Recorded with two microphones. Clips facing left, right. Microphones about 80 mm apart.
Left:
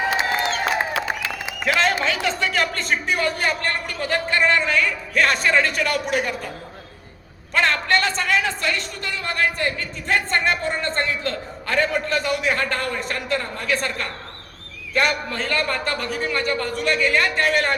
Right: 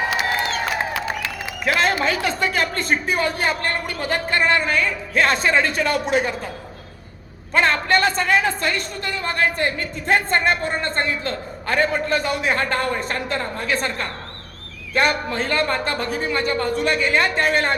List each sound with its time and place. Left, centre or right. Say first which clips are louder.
0.1 s a sound: even; left
1.6 s a man's voice: right 1 dB; centre
7.5 s a man's voice: right 2 dB; centre